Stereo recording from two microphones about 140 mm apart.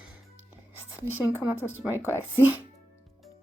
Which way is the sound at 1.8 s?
15° right (ahead or behind).